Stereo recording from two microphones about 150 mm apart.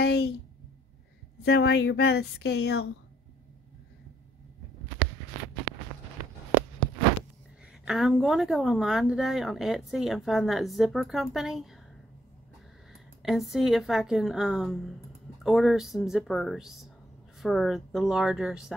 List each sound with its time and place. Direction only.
0.0 s speech: 90° left
1.6 s speech: 90° left
5.0 s walk: 35° left (ahead or behind)
7.8 s speech: 5° right (ahead or behind)
12.9 s speech: centre (ahead or behind)